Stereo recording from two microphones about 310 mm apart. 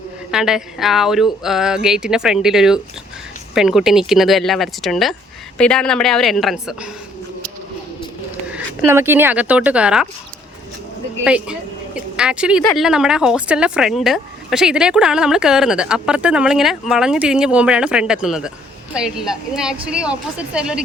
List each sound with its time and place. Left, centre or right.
0.3 s speech: centre
8.5 s speech: centre
11.2 s speech: centre